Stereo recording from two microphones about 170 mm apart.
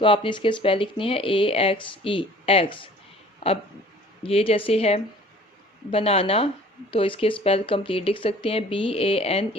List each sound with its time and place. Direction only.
0.0 s speech: 30° left (ahead or behind)